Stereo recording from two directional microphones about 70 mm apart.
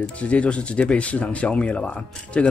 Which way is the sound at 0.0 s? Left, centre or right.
Centre.